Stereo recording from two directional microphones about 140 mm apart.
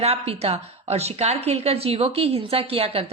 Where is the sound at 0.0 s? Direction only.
45° right (ahead or behind).